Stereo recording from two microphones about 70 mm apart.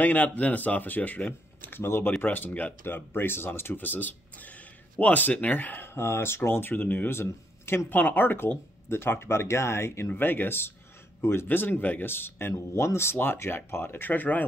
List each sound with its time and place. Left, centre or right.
0.0 s speech: left
7.9 s speech: left